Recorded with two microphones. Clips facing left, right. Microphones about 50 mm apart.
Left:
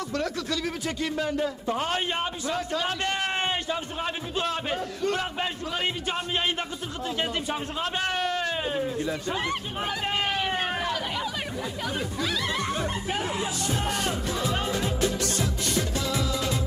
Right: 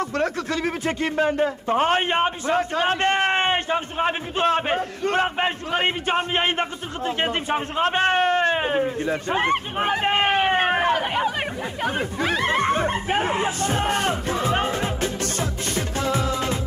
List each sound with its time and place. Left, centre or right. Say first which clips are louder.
0.1 s a man's voice: right 5 dB; right
16.0 s music: right 5 dB; right